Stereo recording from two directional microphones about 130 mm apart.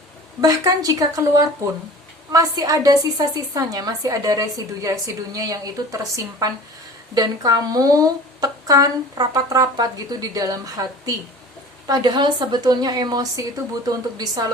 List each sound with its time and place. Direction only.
0.4 s a woman's voice: 30° right (ahead or behind)